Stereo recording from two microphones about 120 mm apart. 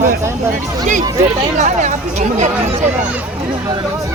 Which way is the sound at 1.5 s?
85° right.